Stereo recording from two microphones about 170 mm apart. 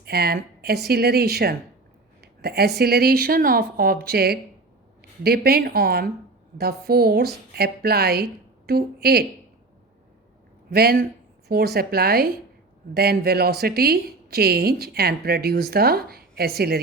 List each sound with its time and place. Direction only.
0.0 s a woman's voice: 65° right (ahead or behind)
10.7 s a woman's voice: 70° right (ahead or behind)